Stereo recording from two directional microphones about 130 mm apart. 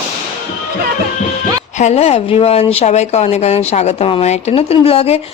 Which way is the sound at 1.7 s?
60° left (ahead or behind).